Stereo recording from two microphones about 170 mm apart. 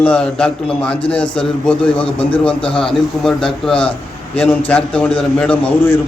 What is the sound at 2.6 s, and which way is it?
Speech, 30° left (ahead or behind).